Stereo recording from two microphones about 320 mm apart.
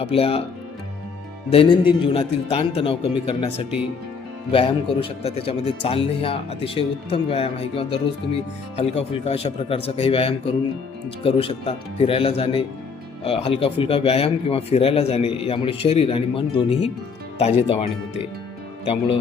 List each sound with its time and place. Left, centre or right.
0.0 s speech: centre
1.5 s speech: centre
18.9 s speech: centre